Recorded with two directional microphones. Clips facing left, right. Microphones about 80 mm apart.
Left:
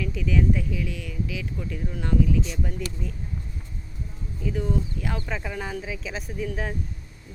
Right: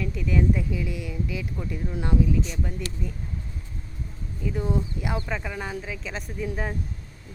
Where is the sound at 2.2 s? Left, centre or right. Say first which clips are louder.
Even; centre.